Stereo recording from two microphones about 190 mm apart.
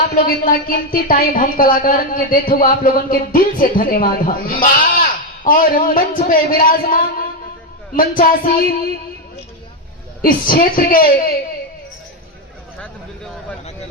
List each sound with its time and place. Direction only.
0.2 s a woman's voice: 50° left (ahead or behind)
10.2 s a woman's voice: 50° left (ahead or behind)